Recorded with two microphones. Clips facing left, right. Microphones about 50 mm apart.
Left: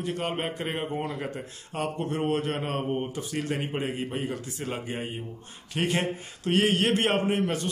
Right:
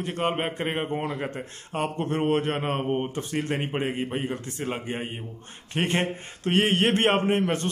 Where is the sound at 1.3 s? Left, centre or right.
Right.